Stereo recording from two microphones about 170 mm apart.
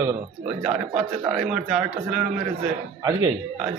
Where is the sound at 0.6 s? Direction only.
40° right (ahead or behind).